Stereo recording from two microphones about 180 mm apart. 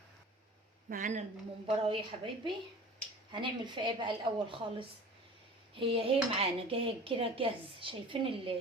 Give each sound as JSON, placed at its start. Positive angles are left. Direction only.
{"t": 0.9, "sound": "speech", "side_deg": -45}
{"t": 1.6, "sound": "a woman's voice", "side_deg": -30}